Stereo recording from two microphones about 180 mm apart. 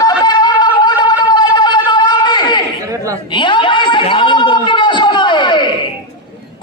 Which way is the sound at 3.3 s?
25° left (ahead or behind).